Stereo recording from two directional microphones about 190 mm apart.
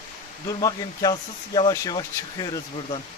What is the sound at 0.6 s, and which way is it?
Speech, 20° left (ahead or behind).